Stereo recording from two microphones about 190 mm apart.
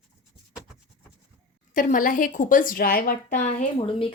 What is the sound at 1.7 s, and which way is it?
Speech, 45° left (ahead or behind).